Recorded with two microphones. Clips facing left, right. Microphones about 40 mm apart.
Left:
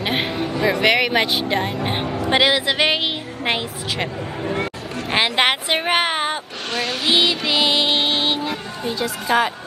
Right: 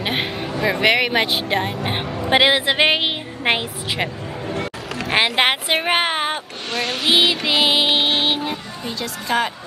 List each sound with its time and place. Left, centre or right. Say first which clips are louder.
0.0 s a sound: left 1 dB; centre
0.7 s speech: even; centre
2.2 s a woman's voice: right 2 dB; right
5.1 s speech: right 1 dB; centre
6.8 s a sound: right 1 dB; right
7.4 s music: right 1 dB; right
8.8 s speech: left 4 dB; centre